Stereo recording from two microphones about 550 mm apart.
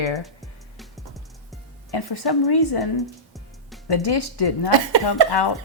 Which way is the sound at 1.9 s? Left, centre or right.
Left.